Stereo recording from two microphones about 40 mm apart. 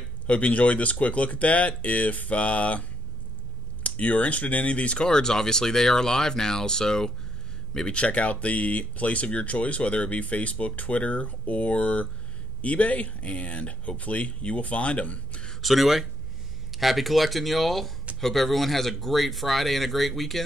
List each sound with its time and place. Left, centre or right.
0.3 s speech: left
3.8 s speech: left
5.0 s speech: centre
7.7 s speech: left
15.6 s speech: centre